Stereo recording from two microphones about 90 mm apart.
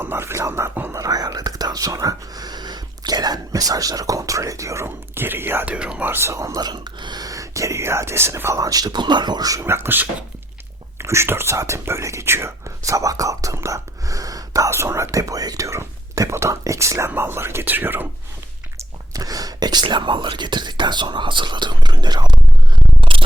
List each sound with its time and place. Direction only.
0.0 s whispering: 25° right (ahead or behind)
0.9 s whispering: 45° right (ahead or behind); by 5.7 s 25° right (ahead or behind)
5.7 s speech: 10° right (ahead or behind)
6.1 s speech: 30° right (ahead or behind)
6.6 s speech: 50° right (ahead or behind)
9.6 s speech: 25° right (ahead or behind)
18.8 s a sound: 40° right (ahead or behind)
19.8 s speech: 60° right (ahead or behind)